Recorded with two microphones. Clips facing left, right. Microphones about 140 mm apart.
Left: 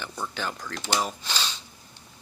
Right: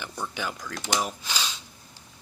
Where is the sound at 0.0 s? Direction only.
10° right (ahead or behind).